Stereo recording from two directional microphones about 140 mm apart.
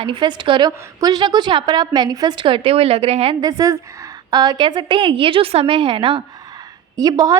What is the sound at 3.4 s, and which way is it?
A woman's voice, 25° right (ahead or behind).